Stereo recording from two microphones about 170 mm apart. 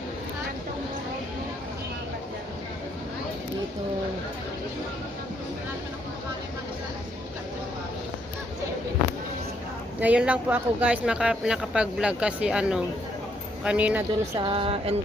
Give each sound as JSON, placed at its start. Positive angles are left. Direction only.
{"t": 10.0, "sound": "a woman's voice", "side_deg": -10}
{"t": 14.3, "sound": "speech", "side_deg": -30}